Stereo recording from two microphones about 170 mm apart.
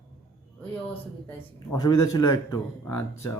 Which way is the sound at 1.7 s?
20° left (ahead or behind).